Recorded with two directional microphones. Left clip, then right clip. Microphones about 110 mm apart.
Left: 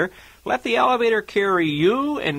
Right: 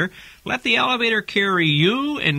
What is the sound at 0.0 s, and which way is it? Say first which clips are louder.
Speech: left 1 dB; 15° right (ahead or behind).